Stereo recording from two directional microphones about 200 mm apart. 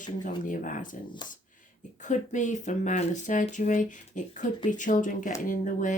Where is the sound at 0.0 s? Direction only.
40° left (ahead or behind).